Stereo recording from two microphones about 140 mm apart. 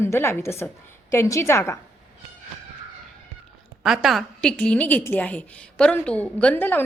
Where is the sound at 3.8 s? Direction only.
5° right (ahead or behind).